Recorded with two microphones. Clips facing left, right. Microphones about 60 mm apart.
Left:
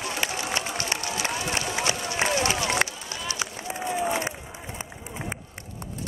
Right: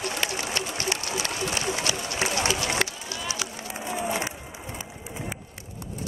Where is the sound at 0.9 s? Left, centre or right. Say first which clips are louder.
Even; left.